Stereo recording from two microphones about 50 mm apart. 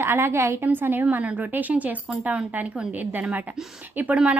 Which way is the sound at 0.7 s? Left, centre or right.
Right.